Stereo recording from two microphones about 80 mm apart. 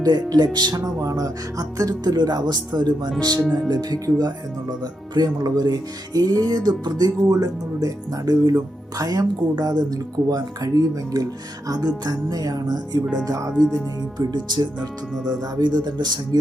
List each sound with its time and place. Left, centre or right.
0.0 s speech: right
3.7 s speech: right
4.8 s music: right
11.7 s speech: right
13.2 s music: right
14.3 s speech: right
15.1 s speech: centre
15.4 s speech: right